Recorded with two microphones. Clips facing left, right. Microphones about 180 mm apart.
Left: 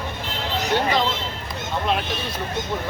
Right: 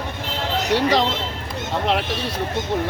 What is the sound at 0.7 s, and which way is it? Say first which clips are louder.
Speech: right 3 dB; 85° right.